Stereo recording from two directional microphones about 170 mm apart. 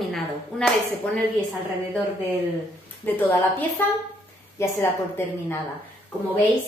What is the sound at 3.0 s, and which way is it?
A woman's voice, 10° left (ahead or behind).